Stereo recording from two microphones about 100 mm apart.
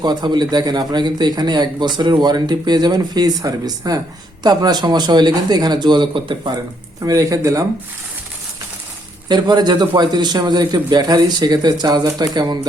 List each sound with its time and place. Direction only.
0.0 s a man's voice: 45° right (ahead or behind)
7.0 s speech: 35° right (ahead or behind)
9.3 s a man's voice: 45° right (ahead or behind)